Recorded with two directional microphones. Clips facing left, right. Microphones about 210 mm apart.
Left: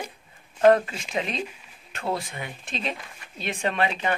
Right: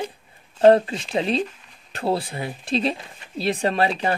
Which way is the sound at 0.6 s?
30° right (ahead or behind).